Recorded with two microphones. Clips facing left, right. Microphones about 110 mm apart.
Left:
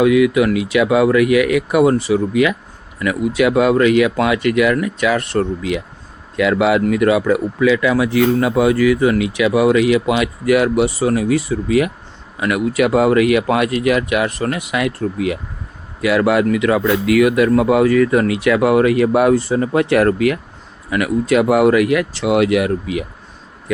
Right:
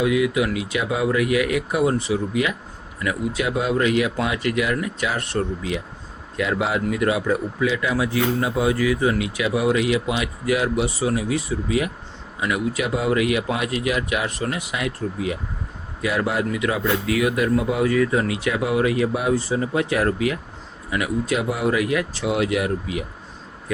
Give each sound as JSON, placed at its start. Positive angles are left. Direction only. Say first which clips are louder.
{"t": 0.0, "sound": "speech", "louder": "left 7 dB", "side_deg": 70}